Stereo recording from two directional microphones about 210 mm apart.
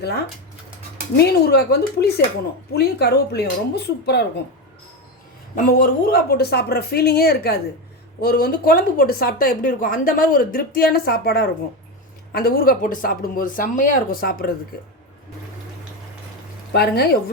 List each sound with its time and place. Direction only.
1.1 s speech: 50° left (ahead or behind)
5.5 s speech: 40° left (ahead or behind)
16.7 s speech: 50° left (ahead or behind)